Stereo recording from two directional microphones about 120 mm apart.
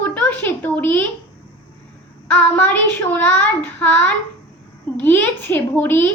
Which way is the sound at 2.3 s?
15° left (ahead or behind).